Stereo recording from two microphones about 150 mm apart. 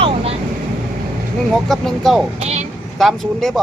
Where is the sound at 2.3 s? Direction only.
45° right (ahead or behind).